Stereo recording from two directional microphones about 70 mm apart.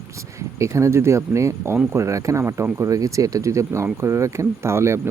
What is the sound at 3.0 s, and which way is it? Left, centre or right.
Speech, right.